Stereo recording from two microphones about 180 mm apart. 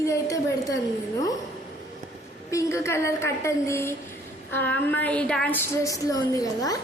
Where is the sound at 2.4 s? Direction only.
15° left (ahead or behind).